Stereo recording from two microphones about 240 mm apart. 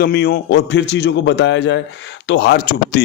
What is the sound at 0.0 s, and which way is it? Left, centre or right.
Speech, left.